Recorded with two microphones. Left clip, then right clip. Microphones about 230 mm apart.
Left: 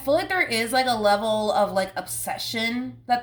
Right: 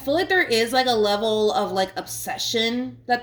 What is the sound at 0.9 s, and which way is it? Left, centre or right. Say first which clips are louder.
Speech: right 1 dB; left.